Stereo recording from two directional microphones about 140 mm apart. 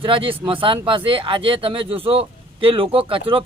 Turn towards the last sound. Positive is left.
turn(degrees=-40)  # may be behind; listen again after turning